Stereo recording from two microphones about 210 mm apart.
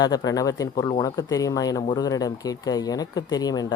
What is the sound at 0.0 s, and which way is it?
Speech, 20° left (ahead or behind).